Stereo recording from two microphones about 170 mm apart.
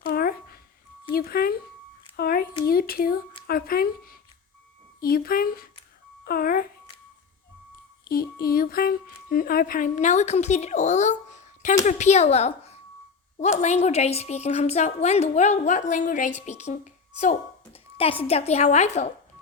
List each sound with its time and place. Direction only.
0.0 s a sound: 65° left (ahead or behind)
3.4 s speech: 60° left (ahead or behind)
8.0 s a woman's voice: 60° left (ahead or behind); by 19.0 s 40° left (ahead or behind)